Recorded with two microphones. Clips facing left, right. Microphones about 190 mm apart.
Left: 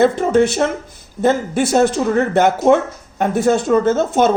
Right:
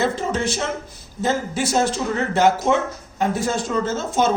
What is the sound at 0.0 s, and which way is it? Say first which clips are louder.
Speech: left 9 dB; 55° left (ahead or behind).